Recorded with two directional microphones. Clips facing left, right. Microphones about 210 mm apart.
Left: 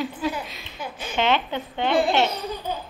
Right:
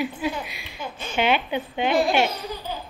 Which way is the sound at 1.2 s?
10° right (ahead or behind).